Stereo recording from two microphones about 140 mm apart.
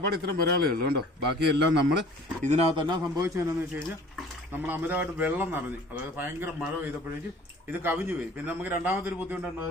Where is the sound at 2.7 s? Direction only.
25° right (ahead or behind).